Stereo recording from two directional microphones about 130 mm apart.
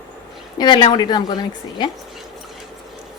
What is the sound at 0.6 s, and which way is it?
Speech, 40° left (ahead or behind).